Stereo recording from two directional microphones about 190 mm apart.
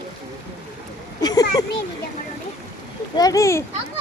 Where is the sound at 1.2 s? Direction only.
20° left (ahead or behind).